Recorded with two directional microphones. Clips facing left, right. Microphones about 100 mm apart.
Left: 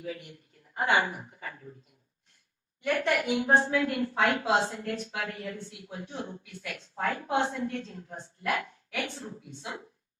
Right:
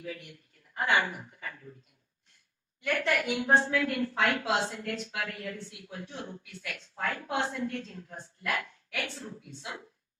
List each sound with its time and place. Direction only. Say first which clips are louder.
0.0 s speech: left 2 dB; 25° left (ahead or behind)
2.8 s a woman's voice: left 2 dB; 25° left (ahead or behind)